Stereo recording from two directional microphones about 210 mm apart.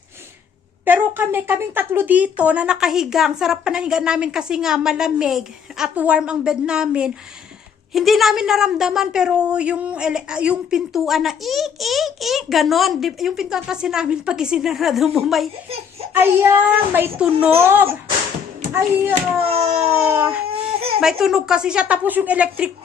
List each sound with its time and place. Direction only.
0.9 s speech: 10° right (ahead or behind)
16.1 s a child's voice: 10° right (ahead or behind)
19.4 s a sound: 25° right (ahead or behind)
20.0 s a child's voice: 10° right (ahead or behind)
20.5 s a sound: 25° right (ahead or behind)
21.0 s speech: centre (ahead or behind)